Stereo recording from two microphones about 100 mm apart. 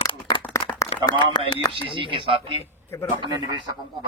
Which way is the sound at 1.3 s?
45° left (ahead or behind).